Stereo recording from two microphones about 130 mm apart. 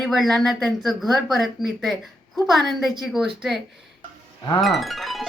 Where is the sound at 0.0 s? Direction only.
Centre (ahead or behind).